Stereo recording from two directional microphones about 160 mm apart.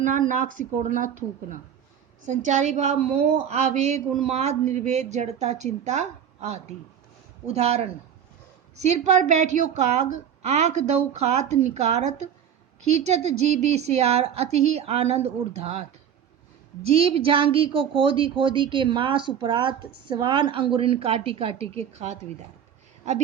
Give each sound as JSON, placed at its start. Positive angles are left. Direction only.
{"t": 0.0, "sound": "a woman's voice", "side_deg": -55}
{"t": 9.0, "sound": "a woman's voice", "side_deg": -50}